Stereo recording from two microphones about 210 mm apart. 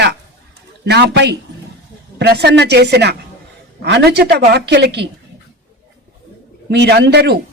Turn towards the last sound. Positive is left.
turn(degrees=-55)  # may be behind; listen again after turning